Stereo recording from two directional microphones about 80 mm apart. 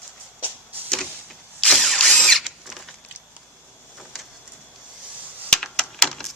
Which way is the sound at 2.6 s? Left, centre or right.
Centre.